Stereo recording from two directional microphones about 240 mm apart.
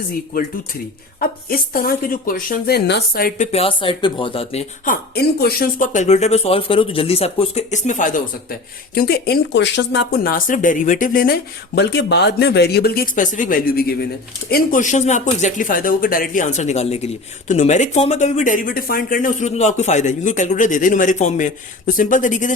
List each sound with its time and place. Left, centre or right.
1.2 s speech: left
5.1 s speech: left